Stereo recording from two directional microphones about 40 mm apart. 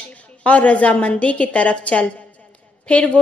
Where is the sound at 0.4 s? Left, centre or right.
Left.